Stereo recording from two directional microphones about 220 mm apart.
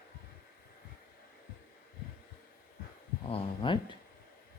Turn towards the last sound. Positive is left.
turn(degrees=20)  # may be behind; listen again after turning